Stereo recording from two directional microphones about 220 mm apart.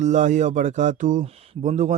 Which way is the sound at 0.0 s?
35° right (ahead or behind).